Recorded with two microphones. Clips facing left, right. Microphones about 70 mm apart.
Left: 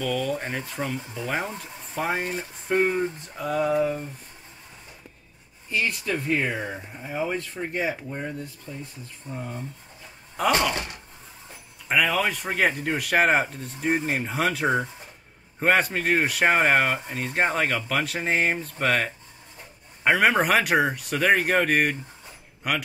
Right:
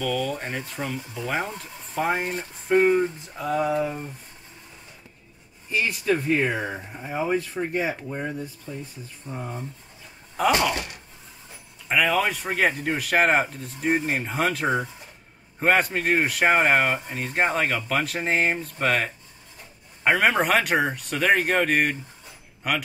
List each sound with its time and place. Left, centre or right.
0.0 s speech: centre
5.7 s speech: centre
8.7 s speech: right
10.5 s speech: centre
11.9 s speech: centre